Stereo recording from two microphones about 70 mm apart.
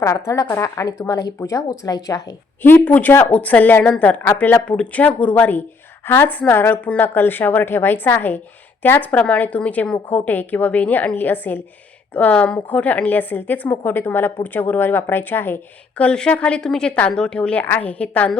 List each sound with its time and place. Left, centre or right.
0.0 s speech: left
2.6 s a woman's voice: left
3.1 s a woman's voice: left
16.0 s a woman's voice: centre